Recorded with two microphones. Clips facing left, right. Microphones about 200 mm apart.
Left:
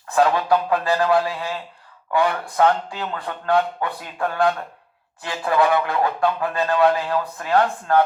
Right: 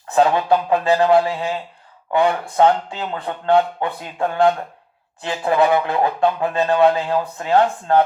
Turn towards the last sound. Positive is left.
turn(degrees=-25)  # may be behind; listen again after turning